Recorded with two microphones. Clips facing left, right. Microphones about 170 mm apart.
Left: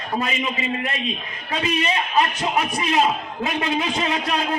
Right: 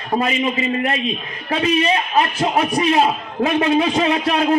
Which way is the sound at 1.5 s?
35° right (ahead or behind).